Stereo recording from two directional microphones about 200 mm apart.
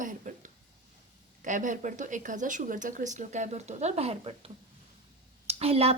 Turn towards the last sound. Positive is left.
turn(degrees=-30)  # may be behind; listen again after turning